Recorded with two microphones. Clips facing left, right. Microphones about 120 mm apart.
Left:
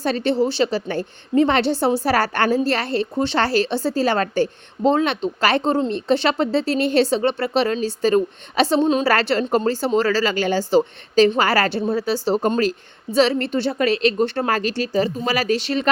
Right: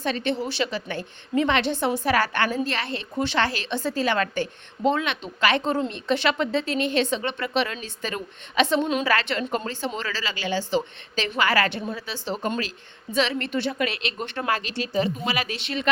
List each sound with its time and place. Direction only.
0.0 s a woman's voice: 35° left (ahead or behind)